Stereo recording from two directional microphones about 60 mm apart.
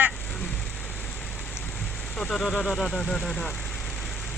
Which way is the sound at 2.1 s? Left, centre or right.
Centre.